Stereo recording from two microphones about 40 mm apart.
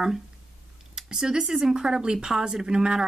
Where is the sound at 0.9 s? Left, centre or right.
Centre.